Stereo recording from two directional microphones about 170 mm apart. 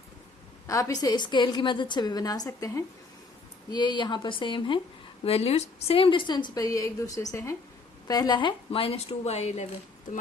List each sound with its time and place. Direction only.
0.7 s a woman's voice: 20° left (ahead or behind); by 9.6 s 40° left (ahead or behind)